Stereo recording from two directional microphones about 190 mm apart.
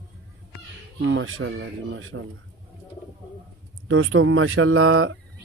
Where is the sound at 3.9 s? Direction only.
90° right.